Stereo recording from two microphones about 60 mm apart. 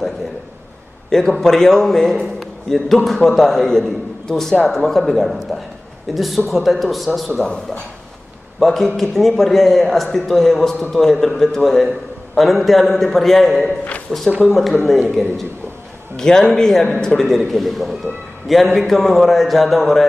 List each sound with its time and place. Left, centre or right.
1.1 s a man's voice: centre
8.5 s a man's voice: centre
13.7 s a man's voice: left
14.5 s a man's voice: centre